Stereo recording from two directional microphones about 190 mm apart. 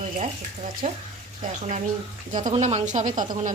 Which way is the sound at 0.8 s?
40° right (ahead or behind).